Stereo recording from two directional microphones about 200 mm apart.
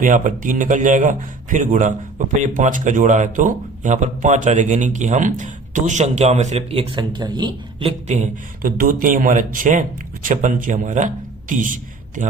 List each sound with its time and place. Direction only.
0.0 s a man's voice: 40° right (ahead or behind)